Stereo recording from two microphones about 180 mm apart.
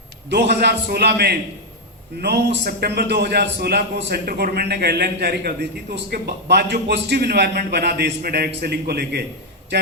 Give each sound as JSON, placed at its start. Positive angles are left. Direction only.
{"t": 0.3, "sound": "a man's voice", "side_deg": -65}